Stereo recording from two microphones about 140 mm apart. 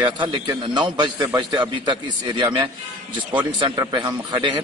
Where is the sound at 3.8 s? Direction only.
30° right (ahead or behind).